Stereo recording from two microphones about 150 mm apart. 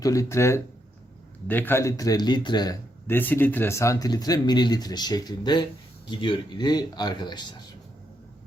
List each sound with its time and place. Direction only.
0.0 s speech: 20° left (ahead or behind)
3.1 s speech: 15° left (ahead or behind); by 7.4 s 30° left (ahead or behind)